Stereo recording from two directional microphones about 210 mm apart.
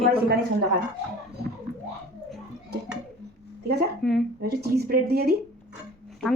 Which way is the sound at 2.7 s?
50° right (ahead or behind).